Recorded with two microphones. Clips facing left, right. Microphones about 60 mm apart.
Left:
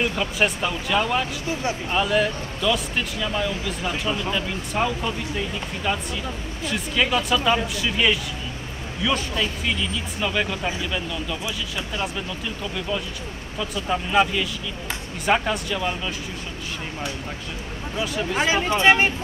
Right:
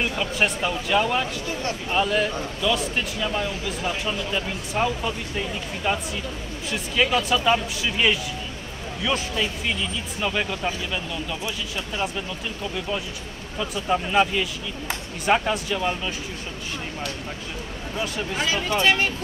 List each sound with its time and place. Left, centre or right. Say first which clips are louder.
0.0 s speech: left 1 dB; centre
3.2 s speech: left 1 dB; centre
5.9 s speech: right 1 dB; centre
6.7 s speech: even; centre
13.8 s speech: even; centre
18.3 s speech: left 4 dB; left